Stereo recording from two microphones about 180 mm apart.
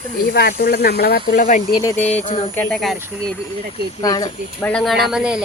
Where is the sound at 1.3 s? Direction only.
50° left (ahead or behind).